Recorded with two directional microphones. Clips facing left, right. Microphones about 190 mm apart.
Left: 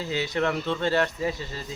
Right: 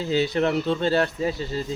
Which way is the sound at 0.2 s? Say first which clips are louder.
Right 3 dB; 35° right (ahead or behind).